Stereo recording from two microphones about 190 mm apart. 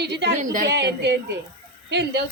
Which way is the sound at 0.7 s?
65° right (ahead or behind).